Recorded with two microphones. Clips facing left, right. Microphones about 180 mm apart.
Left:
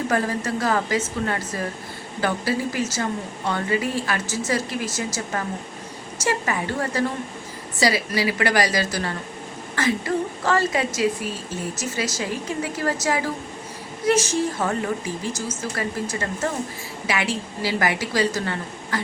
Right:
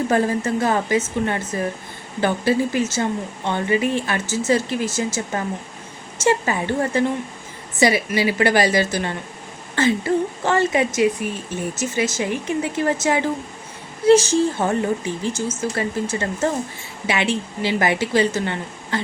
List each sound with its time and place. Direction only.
0.1 s speech: 25° right (ahead or behind)